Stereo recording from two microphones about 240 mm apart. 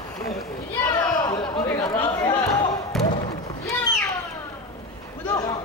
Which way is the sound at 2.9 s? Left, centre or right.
Centre.